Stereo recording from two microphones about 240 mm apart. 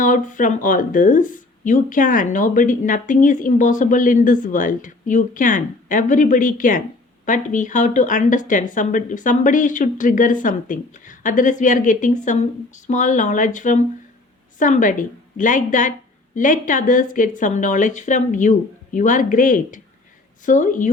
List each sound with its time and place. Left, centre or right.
0.0 s speech: left